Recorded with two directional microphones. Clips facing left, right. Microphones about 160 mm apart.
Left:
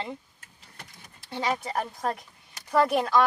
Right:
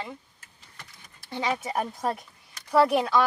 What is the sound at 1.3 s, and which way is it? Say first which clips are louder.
Speech: even; centre (ahead or behind).